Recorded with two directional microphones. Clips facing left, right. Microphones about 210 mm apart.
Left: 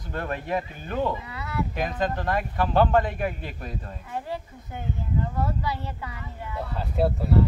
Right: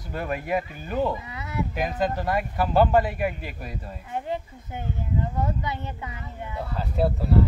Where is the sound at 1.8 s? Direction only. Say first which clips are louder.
Right 2 dB; 5° right (ahead or behind).